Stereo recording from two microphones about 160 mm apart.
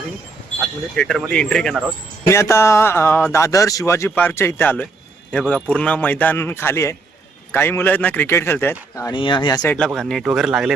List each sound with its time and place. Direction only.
0.9 s speech: 5° left (ahead or behind)
2.2 s speech: 15° left (ahead or behind)
9.0 s speech: 25° left (ahead or behind)
9.6 s speech: 5° left (ahead or behind)